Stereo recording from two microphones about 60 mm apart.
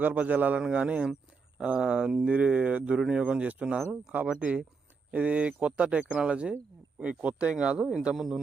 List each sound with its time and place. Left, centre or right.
0.0 s speech: right; by 8.4 s centre